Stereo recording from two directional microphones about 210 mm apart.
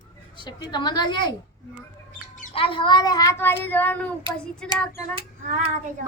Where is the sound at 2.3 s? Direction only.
35° left (ahead or behind).